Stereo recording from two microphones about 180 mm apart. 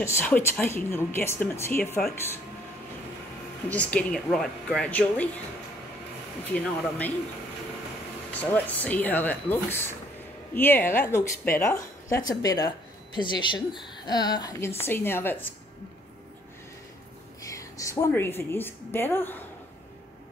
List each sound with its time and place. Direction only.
0.0 s a woman's voice: 15° left (ahead or behind)
3.6 s a woman's voice: 5° left (ahead or behind)
6.5 s a woman's voice: 10° left (ahead or behind)
8.3 s a woman's voice: 10° left (ahead or behind); by 13.6 s 25° left (ahead or behind)
13.9 s a sound: 25° left (ahead or behind)
14.8 s a woman's voice: 10° left (ahead or behind)
17.5 s a woman's voice: 20° left (ahead or behind)